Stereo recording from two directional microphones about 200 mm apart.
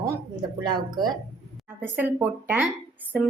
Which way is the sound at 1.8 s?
10° right (ahead or behind).